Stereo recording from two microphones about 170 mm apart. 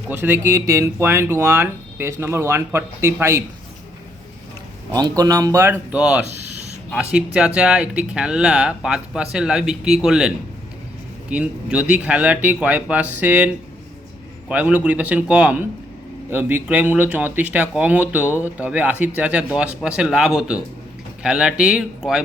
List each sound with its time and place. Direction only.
0.1 s speech: 15° right (ahead or behind)
4.9 s speech: 20° right (ahead or behind)
14.5 s speech: 10° right (ahead or behind)